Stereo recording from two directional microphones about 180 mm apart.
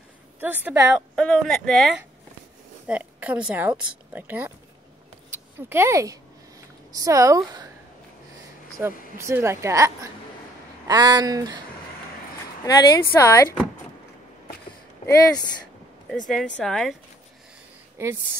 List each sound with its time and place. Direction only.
0.4 s speech: 10° right (ahead or behind)
1.1 s a woman's voice: 5° left (ahead or behind); by 7.7 s 20° right (ahead or behind)
8.7 s speech: 15° right (ahead or behind)
12.6 s speech: 20° left (ahead or behind)
15.0 s speech: 20° left (ahead or behind)
16.3 s speech: 5° left (ahead or behind)